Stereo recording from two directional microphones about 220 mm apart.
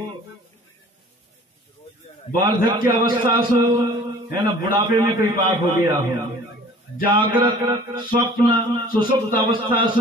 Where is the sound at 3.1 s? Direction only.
20° right (ahead or behind).